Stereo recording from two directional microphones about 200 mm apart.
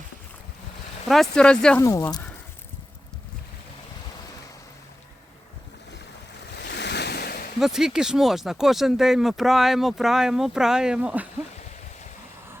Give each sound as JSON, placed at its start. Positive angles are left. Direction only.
{"t": 1.0, "sound": "speech", "side_deg": 0}
{"t": 1.8, "sound": "speech", "side_deg": 15}
{"t": 6.6, "sound": "waves", "side_deg": 60}
{"t": 7.6, "sound": "speech", "side_deg": 0}